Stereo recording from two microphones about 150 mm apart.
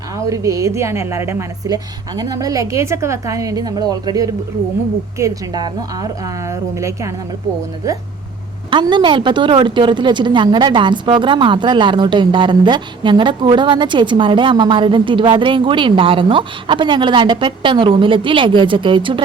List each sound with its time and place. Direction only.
0.3 s a woman's voice: 20° right (ahead or behind)
8.7 s a woman's voice: 30° right (ahead or behind)